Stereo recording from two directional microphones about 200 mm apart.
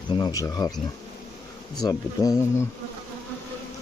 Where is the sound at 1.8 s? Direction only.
15° left (ahead or behind).